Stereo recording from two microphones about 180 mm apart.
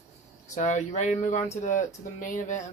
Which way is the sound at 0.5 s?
40° left (ahead or behind).